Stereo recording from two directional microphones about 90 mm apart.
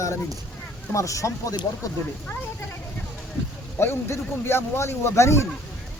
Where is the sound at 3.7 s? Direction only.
25° left (ahead or behind).